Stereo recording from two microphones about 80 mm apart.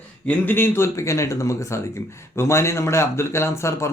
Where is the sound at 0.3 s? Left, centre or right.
Left.